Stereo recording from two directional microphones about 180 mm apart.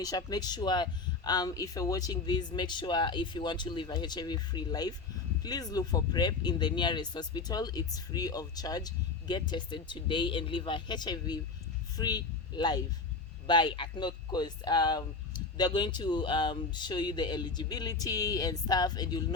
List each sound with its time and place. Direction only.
0.0 s speech: 20° left (ahead or behind)